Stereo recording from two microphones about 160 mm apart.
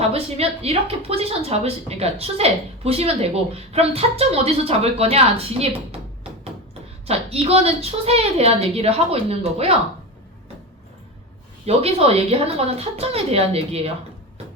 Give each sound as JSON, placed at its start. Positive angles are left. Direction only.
{"t": 0.1, "sound": "speech", "side_deg": -40}
{"t": 7.1, "sound": "speech", "side_deg": -40}
{"t": 11.6, "sound": "speech", "side_deg": -40}